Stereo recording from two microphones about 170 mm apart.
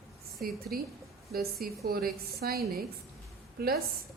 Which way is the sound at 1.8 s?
65° right (ahead or behind).